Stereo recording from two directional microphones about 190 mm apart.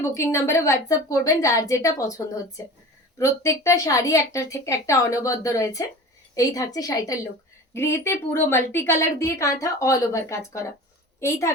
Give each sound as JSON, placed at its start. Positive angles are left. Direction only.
{"t": 0.0, "sound": "a woman's voice", "side_deg": 15}